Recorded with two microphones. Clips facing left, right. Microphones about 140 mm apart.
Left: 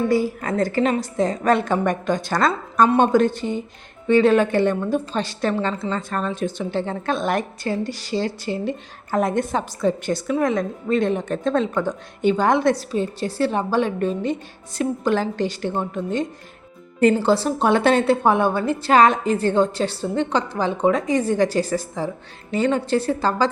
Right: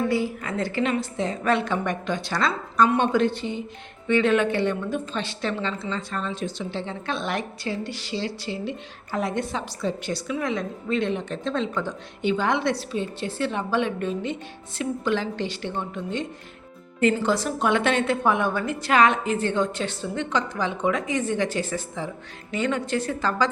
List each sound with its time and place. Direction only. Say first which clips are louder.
0.1 s a woman's voice: left 5 dB; 40° left (ahead or behind)